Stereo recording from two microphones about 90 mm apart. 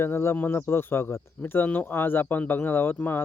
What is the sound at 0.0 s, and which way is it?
Speech, 30° left (ahead or behind).